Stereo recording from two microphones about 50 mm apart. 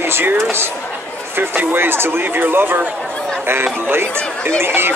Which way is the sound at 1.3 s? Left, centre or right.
Right.